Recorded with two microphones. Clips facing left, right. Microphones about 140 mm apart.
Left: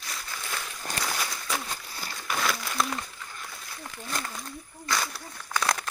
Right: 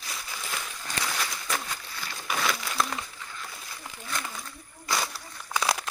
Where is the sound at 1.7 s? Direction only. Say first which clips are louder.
Even; 40° left (ahead or behind).